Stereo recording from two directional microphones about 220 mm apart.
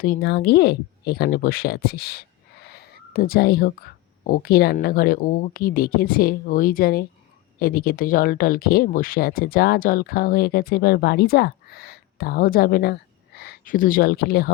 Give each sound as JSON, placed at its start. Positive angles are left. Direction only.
{"t": 0.0, "sound": "speech", "side_deg": 45}